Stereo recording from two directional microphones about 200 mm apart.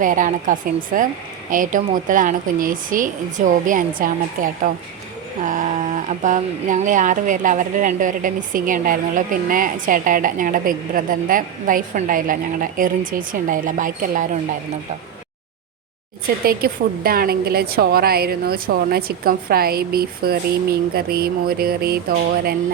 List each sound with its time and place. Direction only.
0.0 s speech: 40° right (ahead or behind)
16.4 s a woman's voice: 50° right (ahead or behind)